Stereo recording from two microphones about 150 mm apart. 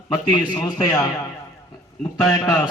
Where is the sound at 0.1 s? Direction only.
30° left (ahead or behind).